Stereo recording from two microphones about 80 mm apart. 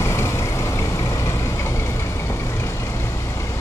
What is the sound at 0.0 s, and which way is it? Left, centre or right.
Vehicle, left.